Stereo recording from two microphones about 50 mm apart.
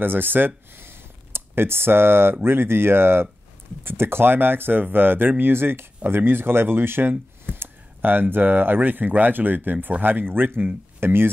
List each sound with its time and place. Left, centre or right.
0.0 s speech: right
0.7 s a sound: right
2.4 s speech: right